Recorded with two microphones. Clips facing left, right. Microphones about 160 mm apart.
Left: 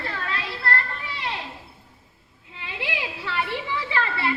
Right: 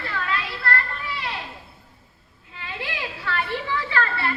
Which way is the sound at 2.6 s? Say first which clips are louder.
Left 1 dB; 20° left (ahead or behind).